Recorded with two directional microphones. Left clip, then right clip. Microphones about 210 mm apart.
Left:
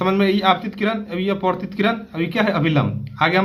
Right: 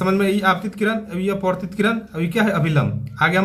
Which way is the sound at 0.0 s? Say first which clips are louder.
Left 1 dB; 30° left (ahead or behind).